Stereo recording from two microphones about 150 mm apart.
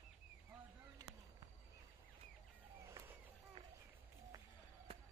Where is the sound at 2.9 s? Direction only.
20° right (ahead or behind).